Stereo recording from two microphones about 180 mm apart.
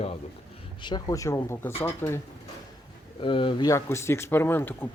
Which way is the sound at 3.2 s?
25° left (ahead or behind).